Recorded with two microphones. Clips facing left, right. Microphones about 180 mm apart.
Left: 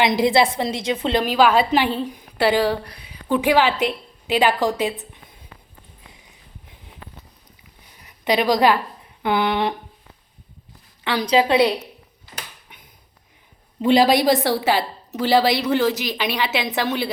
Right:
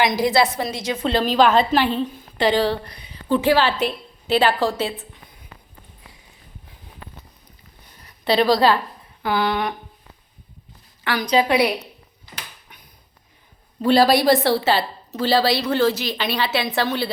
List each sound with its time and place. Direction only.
0.0 s a woman's voice: 25° left (ahead or behind)
1.2 s a woman's voice: 10° left (ahead or behind)
8.0 s a woman's voice: 15° left (ahead or behind)
11.0 s a woman's voice: 25° left (ahead or behind)
13.8 s a woman's voice: 20° left (ahead or behind)